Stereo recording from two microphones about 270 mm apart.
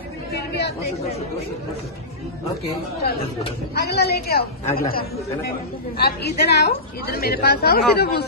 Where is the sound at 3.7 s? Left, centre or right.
Left.